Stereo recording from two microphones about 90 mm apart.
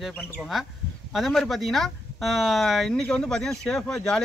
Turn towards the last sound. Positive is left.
turn(degrees=5)  # may be behind; listen again after turning